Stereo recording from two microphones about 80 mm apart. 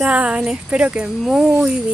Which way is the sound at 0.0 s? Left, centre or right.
Centre.